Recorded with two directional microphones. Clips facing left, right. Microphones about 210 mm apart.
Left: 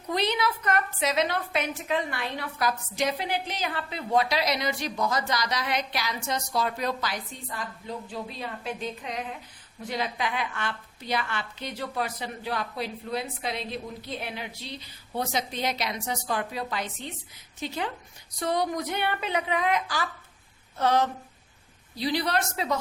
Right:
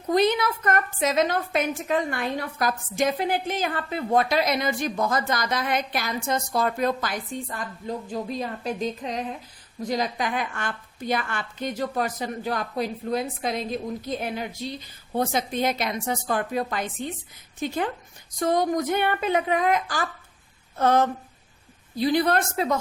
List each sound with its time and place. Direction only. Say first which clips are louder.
0.1 s a woman's voice: right 6 dB; 45° right (ahead or behind)